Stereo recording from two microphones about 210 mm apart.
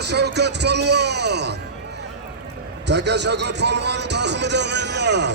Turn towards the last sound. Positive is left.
turn(degrees=-55)  # may be behind; listen again after turning